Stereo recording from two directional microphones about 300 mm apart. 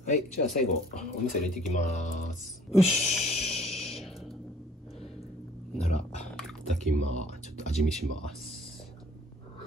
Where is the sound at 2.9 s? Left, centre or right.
Centre.